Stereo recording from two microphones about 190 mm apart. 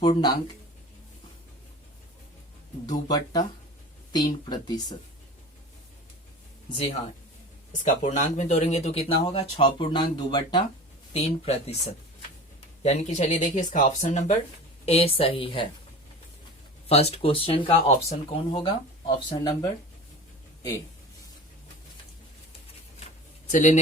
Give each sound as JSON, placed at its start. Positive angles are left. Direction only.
{"t": 0.0, "sound": "speech", "side_deg": 25}
{"t": 3.1, "sound": "speech", "side_deg": 20}
{"t": 7.7, "sound": "speech", "side_deg": 40}
{"t": 16.9, "sound": "speech", "side_deg": 35}
{"t": 23.5, "sound": "speech", "side_deg": 40}